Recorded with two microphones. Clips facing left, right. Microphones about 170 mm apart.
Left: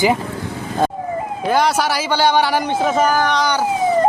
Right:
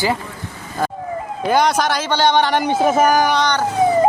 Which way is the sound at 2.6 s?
10° right (ahead or behind).